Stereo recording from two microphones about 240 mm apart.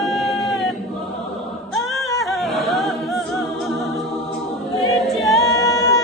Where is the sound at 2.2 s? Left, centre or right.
Centre.